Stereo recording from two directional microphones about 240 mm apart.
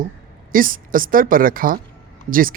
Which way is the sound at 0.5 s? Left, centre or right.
Right.